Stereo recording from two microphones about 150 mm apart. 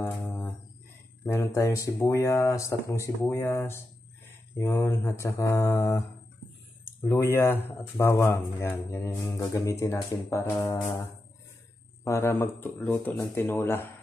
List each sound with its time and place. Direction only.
0.0 s music: 15° left (ahead or behind)
1.2 s speech: 20° left (ahead or behind)
7.1 s speech: 15° left (ahead or behind)